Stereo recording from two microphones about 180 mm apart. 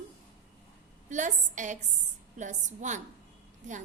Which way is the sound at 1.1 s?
45° right (ahead or behind).